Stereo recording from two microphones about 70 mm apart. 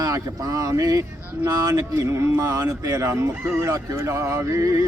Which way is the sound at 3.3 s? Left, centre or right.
Right.